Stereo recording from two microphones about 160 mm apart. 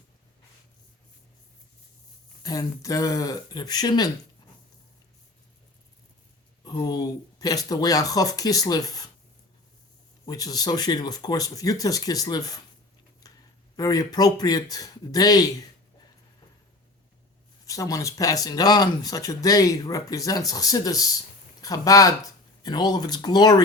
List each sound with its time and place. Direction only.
2.4 s speech: 25° left (ahead or behind)
6.7 s speech: 25° left (ahead or behind)
10.2 s speech: 25° left (ahead or behind)
13.7 s speech: 25° left (ahead or behind)
17.7 s speech: 20° left (ahead or behind)